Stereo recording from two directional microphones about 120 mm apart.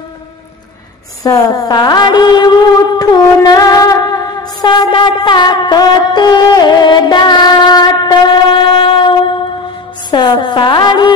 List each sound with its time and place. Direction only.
1.2 s music: 30° left (ahead or behind)
10.1 s speech: 40° left (ahead or behind)